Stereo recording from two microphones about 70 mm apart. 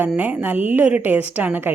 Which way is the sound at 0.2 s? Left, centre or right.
Right.